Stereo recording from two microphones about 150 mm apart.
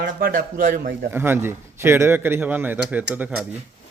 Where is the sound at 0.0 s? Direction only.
70° right (ahead or behind).